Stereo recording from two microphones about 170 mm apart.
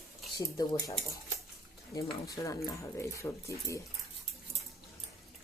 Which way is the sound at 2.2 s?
20° left (ahead or behind).